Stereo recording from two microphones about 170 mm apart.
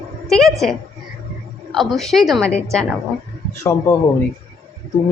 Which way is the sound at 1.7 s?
Centre (ahead or behind).